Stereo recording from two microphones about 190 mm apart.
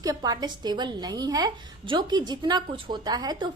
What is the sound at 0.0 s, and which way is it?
A woman's voice, 20° right (ahead or behind).